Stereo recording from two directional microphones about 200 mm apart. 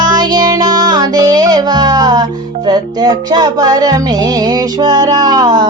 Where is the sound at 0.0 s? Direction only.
20° right (ahead or behind).